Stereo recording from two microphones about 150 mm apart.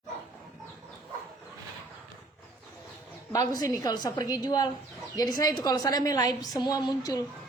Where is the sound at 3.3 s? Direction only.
25° left (ahead or behind).